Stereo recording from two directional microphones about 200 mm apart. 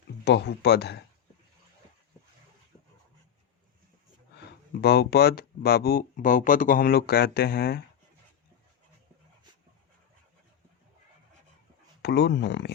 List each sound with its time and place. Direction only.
0.3 s speech: 55° left (ahead or behind)
4.8 s speech: 50° left (ahead or behind)
12.0 s speech: 55° left (ahead or behind)